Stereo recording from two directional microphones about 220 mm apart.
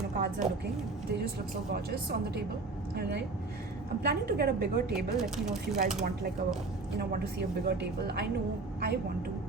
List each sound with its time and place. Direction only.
0.2 s a woman's voice: 45° right (ahead or behind)
1.7 s a woman's voice: 50° right (ahead or behind)
4.9 s speech: centre (ahead or behind)
7.0 s a woman's voice: 45° right (ahead or behind)